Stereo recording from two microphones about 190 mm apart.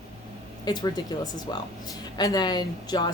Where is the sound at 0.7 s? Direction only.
20° left (ahead or behind).